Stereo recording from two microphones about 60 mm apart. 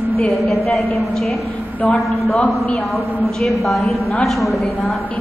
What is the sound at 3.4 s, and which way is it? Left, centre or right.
A woman's voice, centre.